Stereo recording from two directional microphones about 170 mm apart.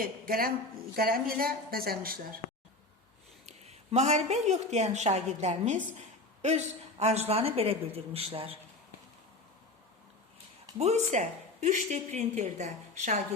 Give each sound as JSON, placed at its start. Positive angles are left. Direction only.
{"t": 0.0, "sound": "a woman's voice", "side_deg": -60}
{"t": 3.4, "sound": "a woman's voice", "side_deg": -40}
{"t": 7.0, "sound": "a woman's voice", "side_deg": -40}
{"t": 10.8, "sound": "a woman's voice", "side_deg": -40}